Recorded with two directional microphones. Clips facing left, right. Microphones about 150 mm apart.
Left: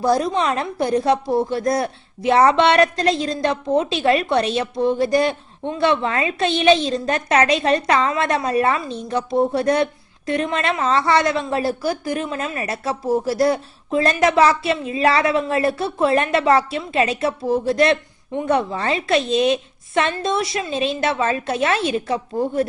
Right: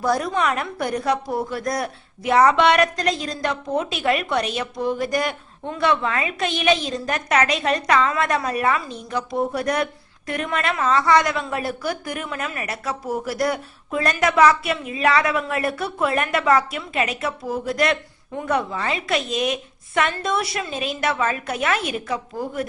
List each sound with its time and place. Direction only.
0.0 s a woman's voice: 25° left (ahead or behind)